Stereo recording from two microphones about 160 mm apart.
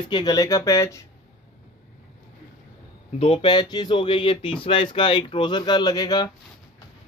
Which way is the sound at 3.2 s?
35° left (ahead or behind).